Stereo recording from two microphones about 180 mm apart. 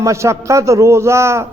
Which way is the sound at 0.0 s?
15° right (ahead or behind).